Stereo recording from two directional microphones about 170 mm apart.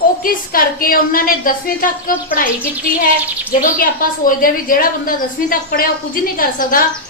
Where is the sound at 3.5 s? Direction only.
55° left (ahead or behind).